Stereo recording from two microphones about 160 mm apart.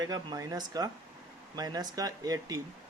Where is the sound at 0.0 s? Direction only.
25° right (ahead or behind).